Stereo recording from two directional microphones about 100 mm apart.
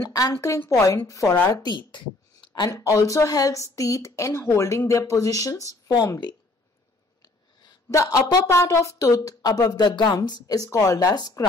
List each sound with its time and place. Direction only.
0.0 s a woman's voice: 35° left (ahead or behind)
1.5 s speech: 45° left (ahead or behind)
2.7 s a woman's voice: 35° left (ahead or behind)
7.9 s a woman's voice: 35° left (ahead or behind)